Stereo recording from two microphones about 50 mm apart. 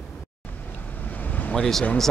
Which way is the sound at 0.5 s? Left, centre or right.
Left.